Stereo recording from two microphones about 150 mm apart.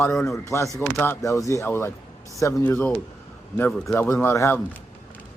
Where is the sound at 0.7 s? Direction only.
15° left (ahead or behind).